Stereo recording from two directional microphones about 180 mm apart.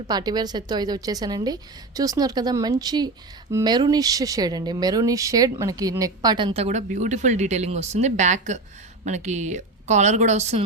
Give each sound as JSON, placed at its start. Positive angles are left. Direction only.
{"t": 0.1, "sound": "a woman's voice", "side_deg": -20}